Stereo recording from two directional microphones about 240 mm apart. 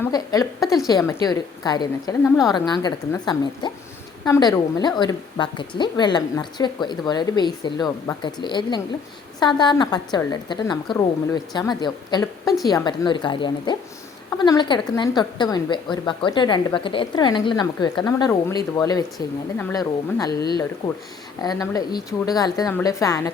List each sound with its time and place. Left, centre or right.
0.0 s a woman's voice: centre